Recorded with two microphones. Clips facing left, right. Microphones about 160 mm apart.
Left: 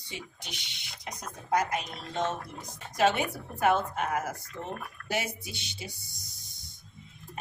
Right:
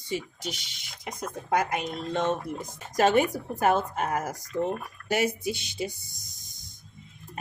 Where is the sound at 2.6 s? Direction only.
45° right (ahead or behind).